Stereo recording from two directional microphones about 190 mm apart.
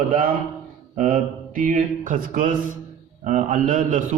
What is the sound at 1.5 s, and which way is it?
A man's voice, 45° right (ahead or behind).